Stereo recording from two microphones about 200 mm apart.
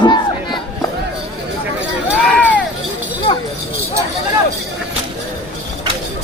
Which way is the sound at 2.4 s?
5° left (ahead or behind).